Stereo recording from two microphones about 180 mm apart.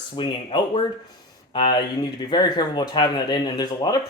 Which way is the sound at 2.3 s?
25° left (ahead or behind).